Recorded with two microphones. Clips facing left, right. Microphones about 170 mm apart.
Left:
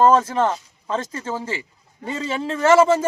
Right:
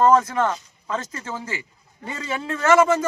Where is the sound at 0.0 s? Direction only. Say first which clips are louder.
Left 1 dB; 30° left (ahead or behind).